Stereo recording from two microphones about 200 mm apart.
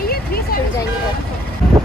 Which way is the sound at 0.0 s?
50° left (ahead or behind).